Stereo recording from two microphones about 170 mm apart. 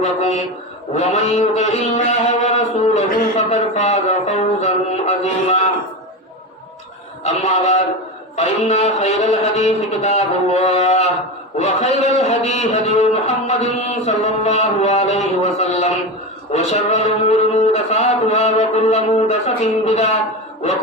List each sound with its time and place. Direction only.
0.0 s a man's voice: 40° left (ahead or behind)
0.9 s a sound: 40° left (ahead or behind)
7.3 s a man's voice: 40° left (ahead or behind)